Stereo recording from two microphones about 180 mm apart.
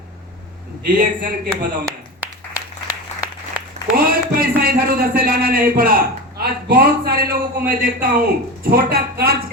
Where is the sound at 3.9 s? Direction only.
55° right (ahead or behind).